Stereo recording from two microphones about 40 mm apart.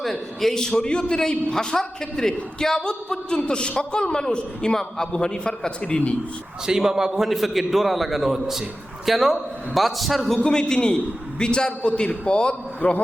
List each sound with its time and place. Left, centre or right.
0.0 s a man's voice: centre
0.8 s a man's voice: left
6.7 s a man's voice: centre
7.2 s a man's voice: centre
10.3 s a man's voice: centre